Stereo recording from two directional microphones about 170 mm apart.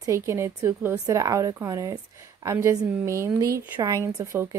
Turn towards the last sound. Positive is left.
turn(degrees=-15)  # may be behind; listen again after turning